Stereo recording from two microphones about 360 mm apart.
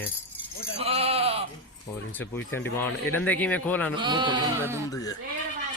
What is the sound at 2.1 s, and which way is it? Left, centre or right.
Speech, centre.